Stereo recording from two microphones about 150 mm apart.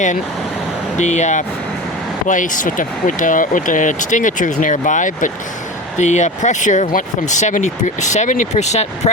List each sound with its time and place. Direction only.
0.9 s speech: 50° left (ahead or behind)